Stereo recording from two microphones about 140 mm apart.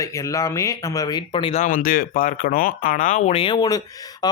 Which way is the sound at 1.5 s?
70° left (ahead or behind).